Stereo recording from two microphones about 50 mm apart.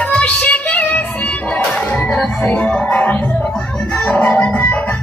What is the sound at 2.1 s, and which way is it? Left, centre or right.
Music, centre.